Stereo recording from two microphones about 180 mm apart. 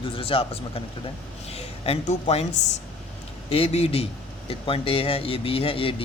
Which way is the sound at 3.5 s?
35° left (ahead or behind).